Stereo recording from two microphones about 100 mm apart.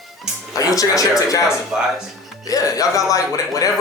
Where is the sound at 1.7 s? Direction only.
10° right (ahead or behind).